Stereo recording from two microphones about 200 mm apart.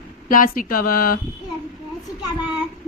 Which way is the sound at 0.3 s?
45° left (ahead or behind).